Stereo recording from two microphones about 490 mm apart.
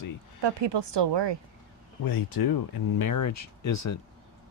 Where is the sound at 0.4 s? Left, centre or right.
Right.